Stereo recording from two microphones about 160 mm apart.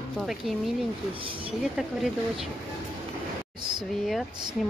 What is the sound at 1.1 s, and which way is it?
Speech, 35° right (ahead or behind).